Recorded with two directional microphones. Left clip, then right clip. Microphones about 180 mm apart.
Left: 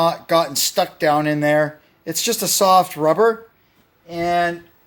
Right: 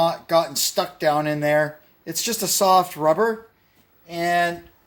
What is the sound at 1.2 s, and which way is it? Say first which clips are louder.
Speech: left 3 dB; 35° left (ahead or behind).